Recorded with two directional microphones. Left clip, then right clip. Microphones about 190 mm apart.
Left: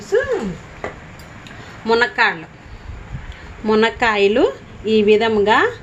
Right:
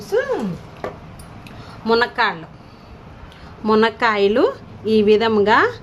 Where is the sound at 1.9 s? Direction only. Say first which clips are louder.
Left 2 dB; centre (ahead or behind).